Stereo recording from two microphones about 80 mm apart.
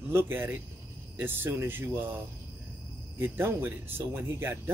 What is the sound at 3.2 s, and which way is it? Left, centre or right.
Speech, right.